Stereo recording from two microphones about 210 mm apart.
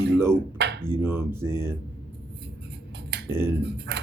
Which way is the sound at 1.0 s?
10° right (ahead or behind).